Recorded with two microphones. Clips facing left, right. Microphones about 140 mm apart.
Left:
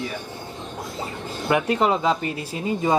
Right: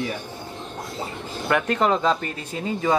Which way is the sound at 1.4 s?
15° left (ahead or behind).